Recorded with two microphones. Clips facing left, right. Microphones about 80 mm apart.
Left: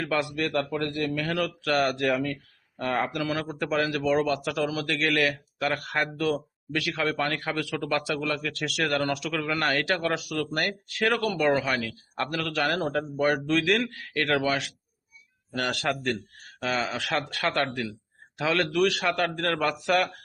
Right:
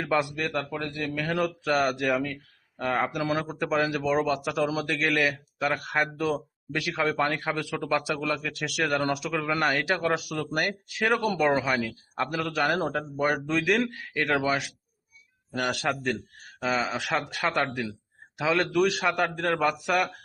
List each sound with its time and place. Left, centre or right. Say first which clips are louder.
0.0 s a man's voice: right 1 dB; centre
3.2 s a man's voice: right 1 dB; right
4.3 s a man's voice: right 1 dB; right
7.8 s a man's voice: right 2 dB; centre
8.0 s a man's voice: even; centre
9.6 s a man's voice: even; centre
12.1 s a man's voice: right 1 dB; centre
12.4 s a man's voice: right 1 dB; right
15.9 s a man's voice: even; centre